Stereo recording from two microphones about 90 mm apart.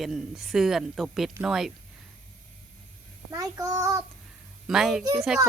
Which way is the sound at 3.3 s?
40° right (ahead or behind).